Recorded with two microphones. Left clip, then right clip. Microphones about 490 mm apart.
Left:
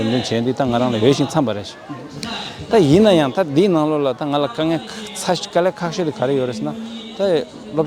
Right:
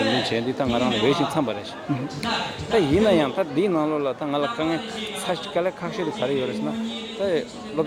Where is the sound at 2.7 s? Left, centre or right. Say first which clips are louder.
Left 7 dB; left.